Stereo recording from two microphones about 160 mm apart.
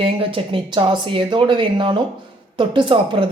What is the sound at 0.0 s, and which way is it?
A woman's voice, 35° right (ahead or behind).